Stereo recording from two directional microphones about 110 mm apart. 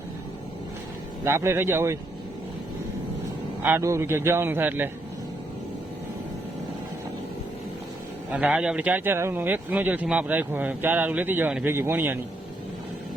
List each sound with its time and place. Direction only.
1.2 s a man's voice: 25° right (ahead or behind)
3.6 s a man's voice: 20° right (ahead or behind)
8.3 s a man's voice: 10° right (ahead or behind)